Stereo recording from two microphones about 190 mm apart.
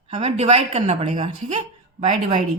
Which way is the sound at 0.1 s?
35° right (ahead or behind).